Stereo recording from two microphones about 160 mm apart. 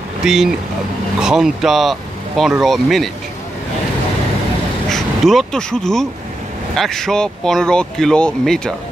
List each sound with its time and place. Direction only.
0.2 s speech: 5° right (ahead or behind)
4.8 s speech: centre (ahead or behind)